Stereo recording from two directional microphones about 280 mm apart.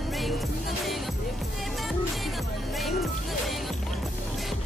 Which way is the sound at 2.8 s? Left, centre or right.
Centre.